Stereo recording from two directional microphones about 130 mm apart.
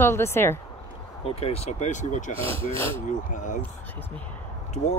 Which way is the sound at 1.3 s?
50° left (ahead or behind).